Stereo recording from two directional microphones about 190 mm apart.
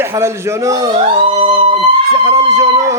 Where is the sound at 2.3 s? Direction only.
15° right (ahead or behind).